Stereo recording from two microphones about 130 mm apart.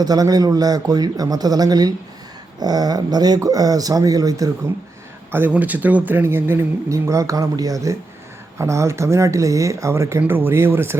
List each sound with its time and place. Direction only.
0.0 s speech: 30° right (ahead or behind)
5.3 s speech: 15° right (ahead or behind)